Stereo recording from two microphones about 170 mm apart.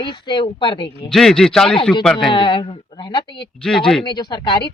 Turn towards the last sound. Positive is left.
turn(degrees=25)  # may be behind; listen again after turning